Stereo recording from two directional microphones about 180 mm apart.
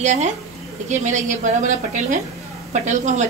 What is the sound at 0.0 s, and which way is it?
A woman's voice, 40° right (ahead or behind).